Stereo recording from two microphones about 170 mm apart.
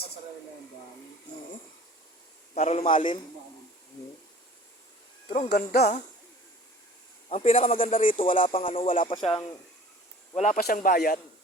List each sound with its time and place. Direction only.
2.6 s speech: 40° left (ahead or behind)
5.5 s speech: 70° left (ahead or behind)
7.3 s speech: 40° left (ahead or behind)
10.3 s speech: 45° left (ahead or behind)
10.6 s speech: 60° left (ahead or behind)